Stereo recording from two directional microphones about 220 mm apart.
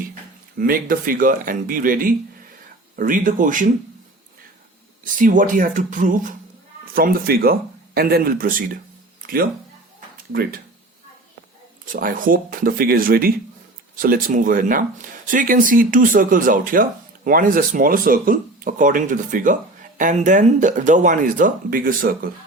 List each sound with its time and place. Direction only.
0.6 s speech: 40° right (ahead or behind)
5.1 s speech: 35° right (ahead or behind)
11.9 s speech: 40° right (ahead or behind)